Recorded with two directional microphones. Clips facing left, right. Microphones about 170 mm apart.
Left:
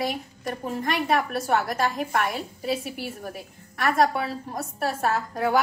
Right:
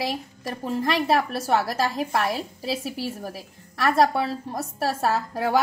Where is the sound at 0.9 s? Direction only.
35° right (ahead or behind).